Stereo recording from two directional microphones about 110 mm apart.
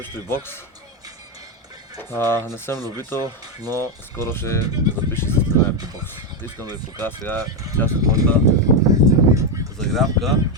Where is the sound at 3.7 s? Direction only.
20° left (ahead or behind).